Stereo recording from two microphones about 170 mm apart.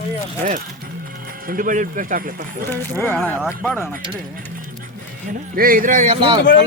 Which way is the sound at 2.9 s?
10° left (ahead or behind).